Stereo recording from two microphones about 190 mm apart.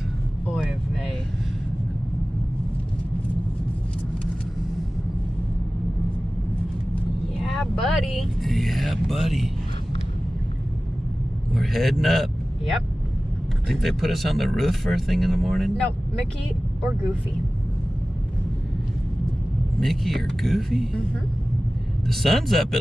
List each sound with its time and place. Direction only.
0.6 s vehicle: centre (ahead or behind)
7.4 s vehicle: centre (ahead or behind)
11.5 s a man's voice: centre (ahead or behind)
13.7 s speech: centre (ahead or behind)
19.8 s speech: centre (ahead or behind)
22.0 s speech: centre (ahead or behind)